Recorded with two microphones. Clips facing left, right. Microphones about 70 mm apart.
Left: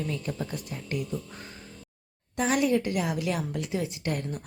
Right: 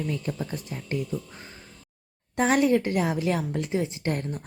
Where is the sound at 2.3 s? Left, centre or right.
Right.